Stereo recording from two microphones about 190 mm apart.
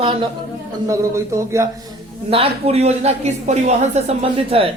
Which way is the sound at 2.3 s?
30° right (ahead or behind).